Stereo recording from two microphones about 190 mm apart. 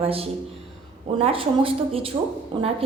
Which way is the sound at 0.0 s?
30° right (ahead or behind).